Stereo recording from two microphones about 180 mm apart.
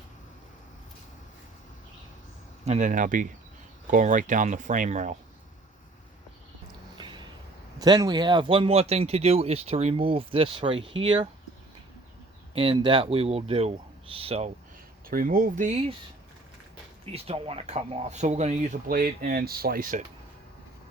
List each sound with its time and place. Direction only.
2.6 s speech: 40° right (ahead or behind)
6.9 s a sound: 25° right (ahead or behind)
7.8 s speech: 20° right (ahead or behind)
12.5 s speech: 30° right (ahead or behind)
15.1 s speech: 50° right (ahead or behind)
17.1 s speech: 35° right (ahead or behind)
18.9 s speech: 50° right (ahead or behind)